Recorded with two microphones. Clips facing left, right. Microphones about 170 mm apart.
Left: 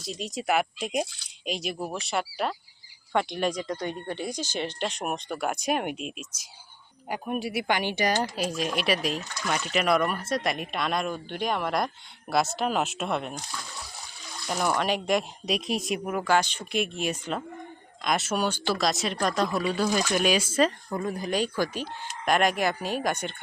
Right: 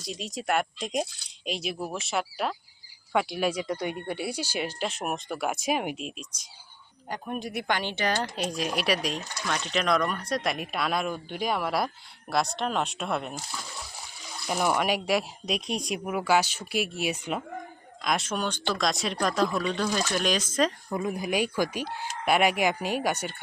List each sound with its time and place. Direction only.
0.0 s speech: centre (ahead or behind)
20.9 s speech: 10° right (ahead or behind)